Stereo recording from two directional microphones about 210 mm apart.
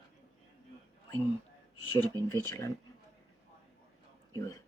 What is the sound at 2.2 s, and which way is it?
Speech, 15° left (ahead or behind).